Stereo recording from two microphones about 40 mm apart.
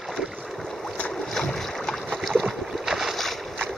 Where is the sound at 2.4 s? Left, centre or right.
Centre.